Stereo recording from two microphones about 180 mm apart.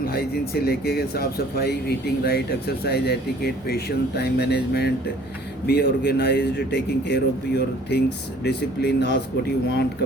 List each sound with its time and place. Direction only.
0.0 s a man's voice: 60° left (ahead or behind)